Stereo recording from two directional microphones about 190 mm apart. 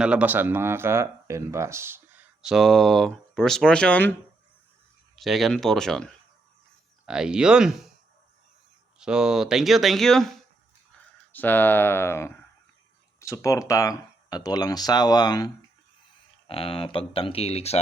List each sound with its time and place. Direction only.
0.0 s speech: 5° right (ahead or behind)
5.1 s speech: centre (ahead or behind)
9.0 s speech: 5° right (ahead or behind); by 17.7 s 35° left (ahead or behind)